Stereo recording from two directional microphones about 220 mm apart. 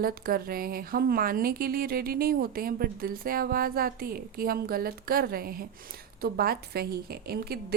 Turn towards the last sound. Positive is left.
turn(degrees=-45)  # may be behind; listen again after turning